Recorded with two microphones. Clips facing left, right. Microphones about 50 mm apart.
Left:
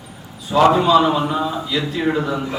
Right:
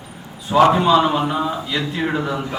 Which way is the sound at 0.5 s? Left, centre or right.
Centre.